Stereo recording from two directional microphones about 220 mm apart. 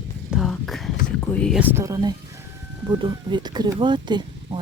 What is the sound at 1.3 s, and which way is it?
Speech, 5° left (ahead or behind).